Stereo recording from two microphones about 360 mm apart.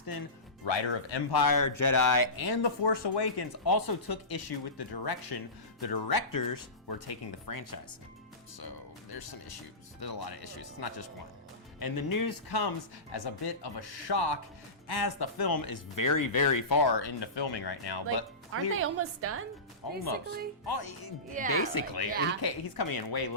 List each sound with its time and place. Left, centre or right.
1.3 s speech: left
10.0 s speech: left
11.8 s speech: left
18.5 s a woman's voice: right
19.8 s speech: left
20.7 s speech: left
21.4 s speech: right
21.7 s a woman's voice: left
22.1 s speech: right
22.4 s speech: left